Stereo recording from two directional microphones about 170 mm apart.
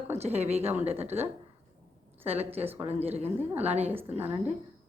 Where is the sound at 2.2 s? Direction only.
35° right (ahead or behind).